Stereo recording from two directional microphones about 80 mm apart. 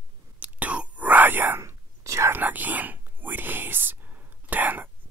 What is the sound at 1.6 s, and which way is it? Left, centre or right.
Whispering, right.